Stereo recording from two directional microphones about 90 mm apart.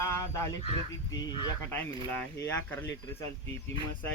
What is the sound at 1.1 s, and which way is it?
Speech, 45° left (ahead or behind).